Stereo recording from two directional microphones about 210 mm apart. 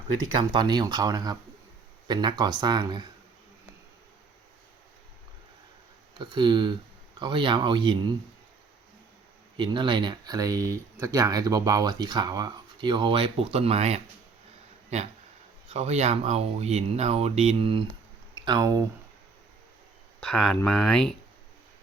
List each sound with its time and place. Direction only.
0.5 s speech: 20° right (ahead or behind)
6.1 s speech: 20° right (ahead or behind)
9.6 s speech: 20° right (ahead or behind)
20.2 s speech: 5° left (ahead or behind)